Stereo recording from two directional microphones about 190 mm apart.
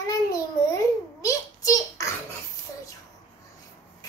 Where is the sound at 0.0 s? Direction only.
20° left (ahead or behind).